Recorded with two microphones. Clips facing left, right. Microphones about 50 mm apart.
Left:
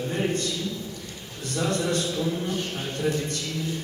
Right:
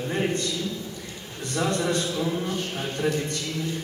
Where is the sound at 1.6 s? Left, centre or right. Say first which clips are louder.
Right 1 dB; right.